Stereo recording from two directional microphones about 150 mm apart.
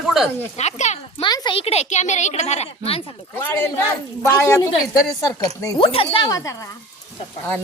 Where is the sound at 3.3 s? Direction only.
15° left (ahead or behind).